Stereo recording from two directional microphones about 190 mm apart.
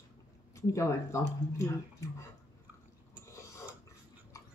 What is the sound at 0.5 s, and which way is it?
Speech, 15° left (ahead or behind).